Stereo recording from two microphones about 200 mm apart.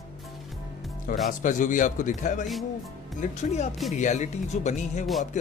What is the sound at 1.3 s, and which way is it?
Speech, 40° left (ahead or behind).